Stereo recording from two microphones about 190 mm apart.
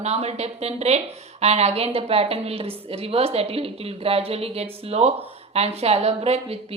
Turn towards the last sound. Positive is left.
turn(degrees=-35)  # may be behind; listen again after turning